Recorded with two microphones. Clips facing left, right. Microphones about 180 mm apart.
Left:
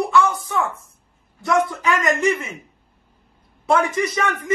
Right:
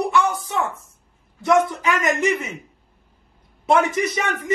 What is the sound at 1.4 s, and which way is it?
Speech, 20° right (ahead or behind).